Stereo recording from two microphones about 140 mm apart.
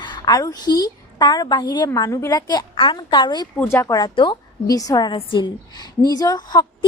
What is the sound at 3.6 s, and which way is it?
A woman's voice, 15° left (ahead or behind).